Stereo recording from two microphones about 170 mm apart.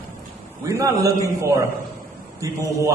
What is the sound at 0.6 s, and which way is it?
A man's voice, 20° right (ahead or behind).